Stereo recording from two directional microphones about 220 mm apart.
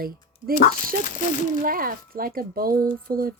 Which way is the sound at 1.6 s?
40° right (ahead or behind).